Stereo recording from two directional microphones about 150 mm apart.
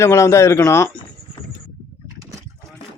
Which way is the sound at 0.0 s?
20° left (ahead or behind).